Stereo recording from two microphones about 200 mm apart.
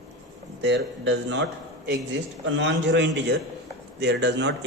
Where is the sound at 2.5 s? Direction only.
65° right (ahead or behind).